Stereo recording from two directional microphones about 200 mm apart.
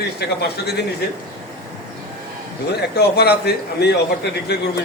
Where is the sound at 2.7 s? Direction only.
55° left (ahead or behind).